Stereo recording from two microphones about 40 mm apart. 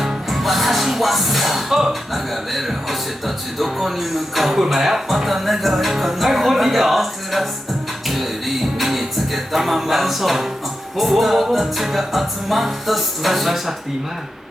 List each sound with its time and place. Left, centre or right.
0.0 s music: centre